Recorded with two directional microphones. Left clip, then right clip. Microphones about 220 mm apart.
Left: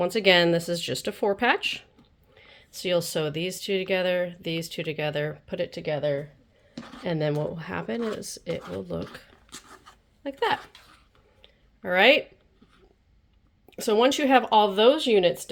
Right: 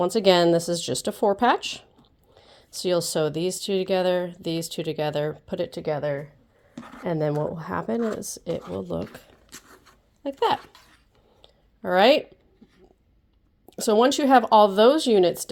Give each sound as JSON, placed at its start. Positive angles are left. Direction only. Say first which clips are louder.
{"t": 0.0, "sound": "a woman's voice", "louder": "right 1 dB", "side_deg": -25}
{"t": 6.7, "sound": "a sound", "louder": "even", "side_deg": 15}
{"t": 7.0, "sound": "a woman's voice", "louder": "right 2 dB", "side_deg": -15}
{"t": 10.2, "sound": "speech", "louder": "right 3 dB", "side_deg": -35}
{"t": 11.9, "sound": "speech", "louder": "right 1 dB", "side_deg": -30}
{"t": 13.7, "sound": "speech", "louder": "right 2 dB", "side_deg": -35}